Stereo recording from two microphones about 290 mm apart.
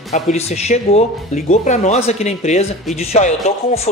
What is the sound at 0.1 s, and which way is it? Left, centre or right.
Speech, left.